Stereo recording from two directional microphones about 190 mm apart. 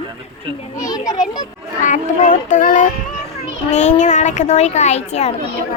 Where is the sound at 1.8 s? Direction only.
40° left (ahead or behind).